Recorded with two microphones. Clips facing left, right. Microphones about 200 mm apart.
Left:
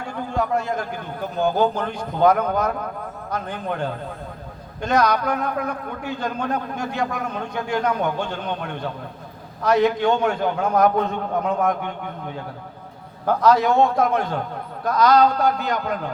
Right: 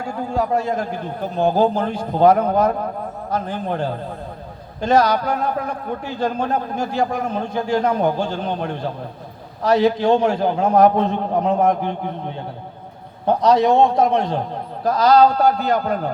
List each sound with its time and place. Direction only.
0.3 s a man's voice: 30° right (ahead or behind)